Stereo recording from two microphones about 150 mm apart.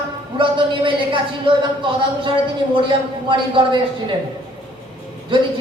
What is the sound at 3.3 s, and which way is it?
Speech, 30° right (ahead or behind).